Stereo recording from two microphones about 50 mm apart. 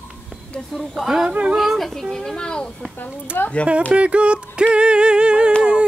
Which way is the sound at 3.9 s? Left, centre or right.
Right.